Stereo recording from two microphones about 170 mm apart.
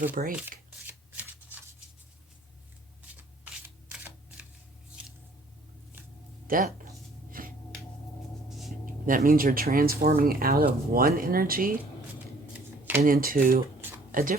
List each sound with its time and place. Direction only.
0.1 s speech: 55° right (ahead or behind)
0.9 s shuffling cards: 10° right (ahead or behind)
3.4 s camera: 5° right (ahead or behind)
6.5 s speech: 55° right (ahead or behind)
7.3 s a sound: 55° right (ahead or behind)
8.4 s a sound: centre (ahead or behind)
9.0 s speech: 55° right (ahead or behind)
12.5 s shuffling cards: 10° right (ahead or behind)
13.0 s speech: 55° right (ahead or behind)